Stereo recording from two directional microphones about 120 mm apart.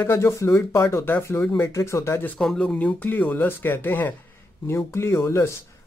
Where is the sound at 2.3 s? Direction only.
5° left (ahead or behind).